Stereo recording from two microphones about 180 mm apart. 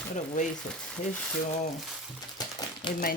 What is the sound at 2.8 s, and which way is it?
Speech, 25° left (ahead or behind).